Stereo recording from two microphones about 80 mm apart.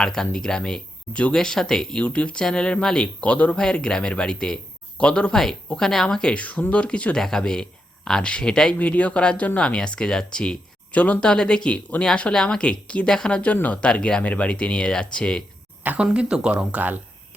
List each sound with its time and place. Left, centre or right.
0.0 s speech: centre
15.8 s speech: right
16.0 s speech: centre